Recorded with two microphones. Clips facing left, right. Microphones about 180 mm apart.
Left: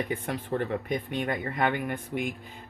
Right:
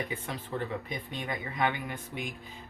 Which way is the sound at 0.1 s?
55° left (ahead or behind).